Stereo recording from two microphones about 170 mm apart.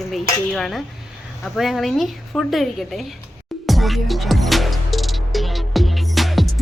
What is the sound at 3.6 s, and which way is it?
Music, centre (ahead or behind).